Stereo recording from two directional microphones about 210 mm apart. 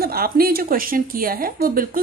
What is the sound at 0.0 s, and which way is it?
Speech, 45° right (ahead or behind).